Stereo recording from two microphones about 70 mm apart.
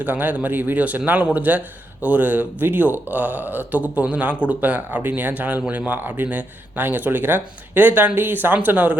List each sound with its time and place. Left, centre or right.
0.0 s a man's voice: right